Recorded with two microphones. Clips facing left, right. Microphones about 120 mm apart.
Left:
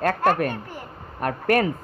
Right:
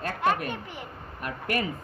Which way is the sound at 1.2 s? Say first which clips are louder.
Left 9 dB; 50° left (ahead or behind).